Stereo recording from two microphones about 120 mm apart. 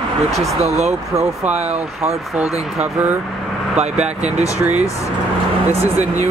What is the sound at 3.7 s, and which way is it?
Speech, 65° right (ahead or behind).